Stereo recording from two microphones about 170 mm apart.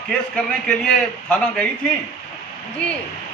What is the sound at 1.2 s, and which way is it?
Speech, 5° left (ahead or behind).